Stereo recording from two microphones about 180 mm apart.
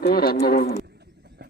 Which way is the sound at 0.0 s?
55° left (ahead or behind).